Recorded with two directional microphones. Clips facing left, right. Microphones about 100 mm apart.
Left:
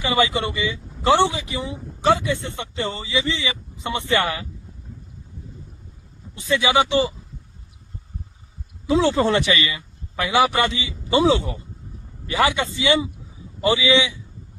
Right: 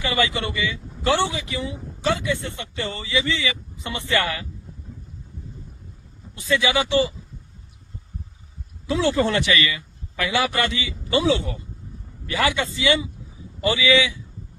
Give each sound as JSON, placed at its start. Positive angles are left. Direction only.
{"t": 0.0, "sound": "speech", "side_deg": 20}
{"t": 6.3, "sound": "speech", "side_deg": 25}
{"t": 8.9, "sound": "speech", "side_deg": 20}